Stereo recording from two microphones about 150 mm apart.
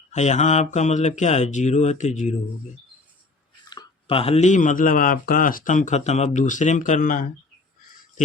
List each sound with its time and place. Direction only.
0.1 s speech: 50° left (ahead or behind)
3.7 s speech: 30° left (ahead or behind); by 7.3 s 65° left (ahead or behind)